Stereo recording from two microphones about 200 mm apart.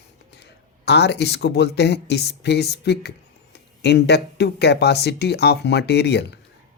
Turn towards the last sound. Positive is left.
turn(degrees=60)  # may be behind; listen again after turning